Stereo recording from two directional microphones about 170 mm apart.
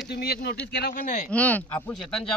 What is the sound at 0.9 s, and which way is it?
Speech, 50° left (ahead or behind).